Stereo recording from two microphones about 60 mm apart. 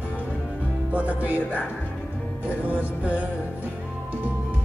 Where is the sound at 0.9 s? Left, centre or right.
Right.